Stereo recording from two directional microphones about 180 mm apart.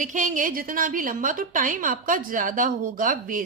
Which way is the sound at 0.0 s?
45° right (ahead or behind).